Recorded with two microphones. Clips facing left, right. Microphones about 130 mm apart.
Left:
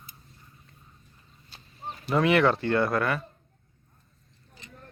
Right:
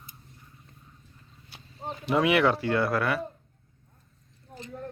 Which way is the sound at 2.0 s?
10° right (ahead or behind).